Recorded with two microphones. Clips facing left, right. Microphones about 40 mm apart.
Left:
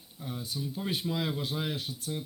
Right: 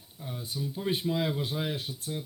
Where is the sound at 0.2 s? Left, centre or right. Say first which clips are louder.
Even; centre.